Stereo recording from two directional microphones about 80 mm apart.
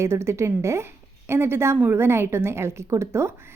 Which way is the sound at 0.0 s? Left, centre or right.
Right.